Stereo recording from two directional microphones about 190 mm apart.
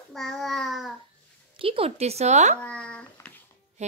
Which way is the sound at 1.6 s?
30° right (ahead or behind).